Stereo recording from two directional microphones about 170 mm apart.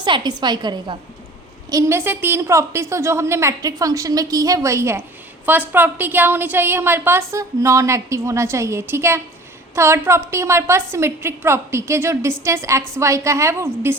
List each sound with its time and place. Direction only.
0.0 s a woman's voice: 25° right (ahead or behind)
1.7 s a woman's voice: 15° right (ahead or behind)